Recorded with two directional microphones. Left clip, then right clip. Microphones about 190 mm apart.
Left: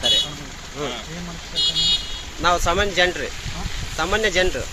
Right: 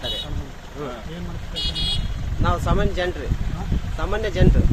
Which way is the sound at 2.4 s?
15° left (ahead or behind).